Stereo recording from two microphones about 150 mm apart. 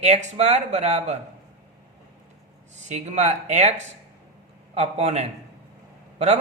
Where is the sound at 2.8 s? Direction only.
50° right (ahead or behind).